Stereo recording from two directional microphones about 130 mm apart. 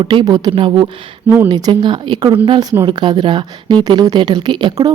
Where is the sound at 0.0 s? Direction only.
40° right (ahead or behind).